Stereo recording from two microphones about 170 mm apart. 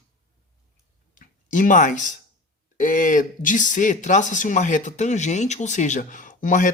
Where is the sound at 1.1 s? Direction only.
50° left (ahead or behind).